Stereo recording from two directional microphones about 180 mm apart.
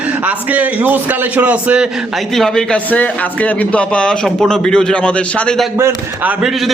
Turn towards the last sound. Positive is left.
turn(degrees=-5)  # may be behind; listen again after turning